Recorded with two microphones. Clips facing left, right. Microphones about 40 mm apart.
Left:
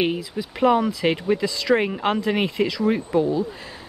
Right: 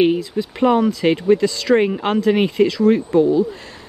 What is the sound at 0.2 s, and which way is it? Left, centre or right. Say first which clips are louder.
Speech: right 3 dB; centre.